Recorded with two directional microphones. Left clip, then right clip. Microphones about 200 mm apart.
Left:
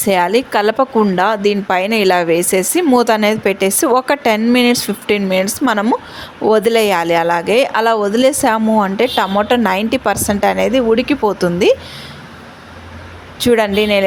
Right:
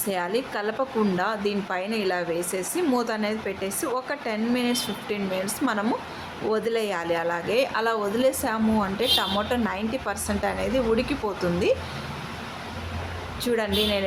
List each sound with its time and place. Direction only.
0.0 s a woman's voice: 45° left (ahead or behind)
13.4 s a woman's voice: 45° left (ahead or behind)